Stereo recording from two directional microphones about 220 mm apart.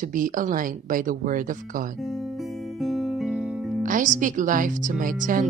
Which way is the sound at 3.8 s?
35° right (ahead or behind).